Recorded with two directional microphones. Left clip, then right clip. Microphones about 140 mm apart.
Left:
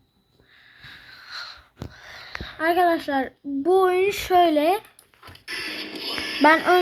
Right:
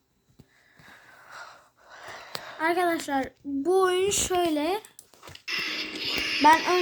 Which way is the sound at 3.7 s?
25° left (ahead or behind).